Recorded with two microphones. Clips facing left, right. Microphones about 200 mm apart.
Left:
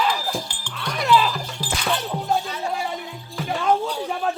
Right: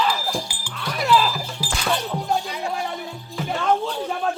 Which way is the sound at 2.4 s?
15° right (ahead or behind).